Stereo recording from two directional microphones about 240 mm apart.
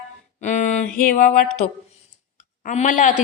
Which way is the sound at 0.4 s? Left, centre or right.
Left.